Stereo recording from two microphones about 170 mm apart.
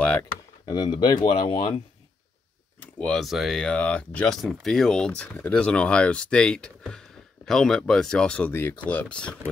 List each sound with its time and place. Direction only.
0.0 s a sound: 5° left (ahead or behind)
0.7 s speech: 25° left (ahead or behind)
2.8 s speech: 5° left (ahead or behind)